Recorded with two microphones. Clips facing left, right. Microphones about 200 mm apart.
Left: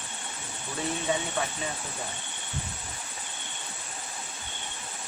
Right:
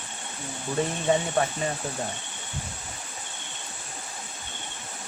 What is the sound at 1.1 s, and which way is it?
Speech, 50° right (ahead or behind).